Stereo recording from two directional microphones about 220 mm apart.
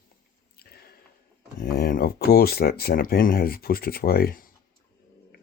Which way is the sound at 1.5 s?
40° left (ahead or behind).